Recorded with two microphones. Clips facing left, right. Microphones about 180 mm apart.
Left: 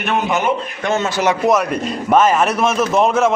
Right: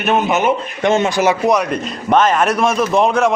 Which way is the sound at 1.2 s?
Centre (ahead or behind).